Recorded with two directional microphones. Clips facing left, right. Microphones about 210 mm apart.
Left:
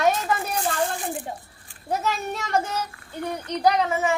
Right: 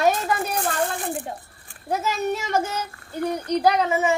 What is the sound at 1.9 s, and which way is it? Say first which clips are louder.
Speech: right 3 dB; centre (ahead or behind).